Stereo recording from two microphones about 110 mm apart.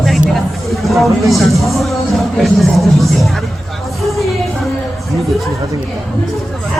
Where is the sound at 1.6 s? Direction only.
Centre (ahead or behind).